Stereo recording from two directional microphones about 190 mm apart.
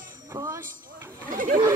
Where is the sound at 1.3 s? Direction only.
45° right (ahead or behind).